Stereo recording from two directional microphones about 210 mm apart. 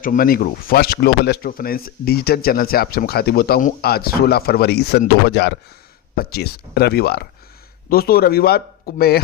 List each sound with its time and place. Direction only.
0.0 s speech: 40° left (ahead or behind)